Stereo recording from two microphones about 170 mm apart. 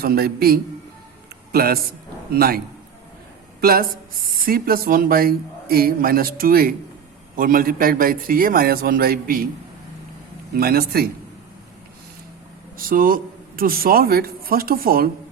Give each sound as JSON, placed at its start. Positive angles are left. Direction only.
{"t": 0.0, "sound": "speech", "side_deg": -65}
{"t": 3.6, "sound": "speech", "side_deg": -60}
{"t": 10.5, "sound": "speech", "side_deg": -65}
{"t": 12.7, "sound": "a man's voice", "side_deg": -55}